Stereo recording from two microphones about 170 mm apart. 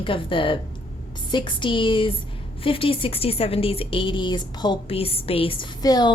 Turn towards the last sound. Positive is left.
turn(degrees=25)  # may be behind; listen again after turning